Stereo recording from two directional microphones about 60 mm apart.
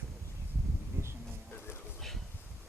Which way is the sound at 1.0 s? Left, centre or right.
Right.